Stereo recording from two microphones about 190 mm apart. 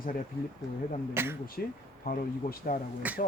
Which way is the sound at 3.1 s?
10° right (ahead or behind).